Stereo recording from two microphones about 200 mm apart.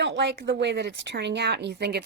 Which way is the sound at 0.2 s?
60° right (ahead or behind).